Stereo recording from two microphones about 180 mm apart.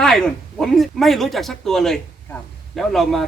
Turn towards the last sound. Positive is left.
turn(degrees=0)  # may be behind; listen again after turning